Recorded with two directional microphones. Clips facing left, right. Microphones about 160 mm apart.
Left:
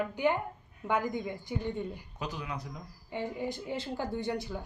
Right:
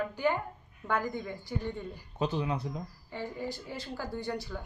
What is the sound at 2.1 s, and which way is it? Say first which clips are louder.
Speech: right 10 dB; 30° right (ahead or behind).